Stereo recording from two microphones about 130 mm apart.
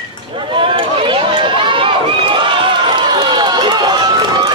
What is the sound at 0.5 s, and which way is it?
Run, 40° right (ahead or behind).